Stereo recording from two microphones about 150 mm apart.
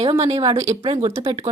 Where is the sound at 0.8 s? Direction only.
35° right (ahead or behind).